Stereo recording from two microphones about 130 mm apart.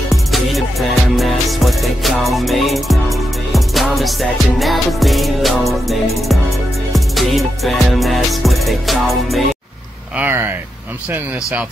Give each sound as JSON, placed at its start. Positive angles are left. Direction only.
{"t": 0.3, "sound": "music", "side_deg": 0}
{"t": 10.1, "sound": "speech", "side_deg": -15}